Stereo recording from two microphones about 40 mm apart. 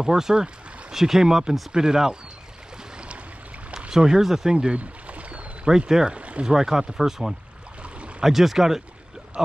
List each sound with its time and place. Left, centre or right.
0.0 s speech: centre
3.9 s speech: centre
4.6 s pour: right
5.7 s speech: centre
6.0 s speech: right
6.4 s speech: centre